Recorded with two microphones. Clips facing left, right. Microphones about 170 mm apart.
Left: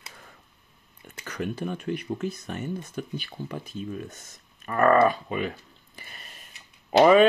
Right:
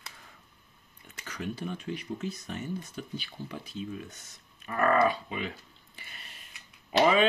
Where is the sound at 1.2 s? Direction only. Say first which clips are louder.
Left 5 dB; 55° left (ahead or behind).